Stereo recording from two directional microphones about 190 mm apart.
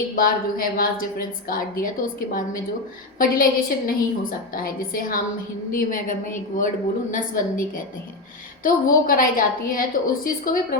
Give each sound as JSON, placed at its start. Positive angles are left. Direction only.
{"t": 0.2, "sound": "a woman's voice", "side_deg": 50}